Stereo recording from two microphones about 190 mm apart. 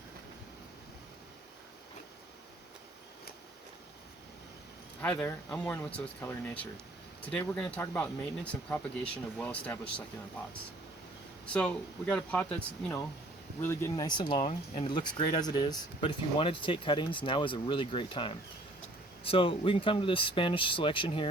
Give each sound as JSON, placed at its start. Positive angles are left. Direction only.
{"t": 4.9, "sound": "speech", "side_deg": 10}
{"t": 11.5, "sound": "speech", "side_deg": 5}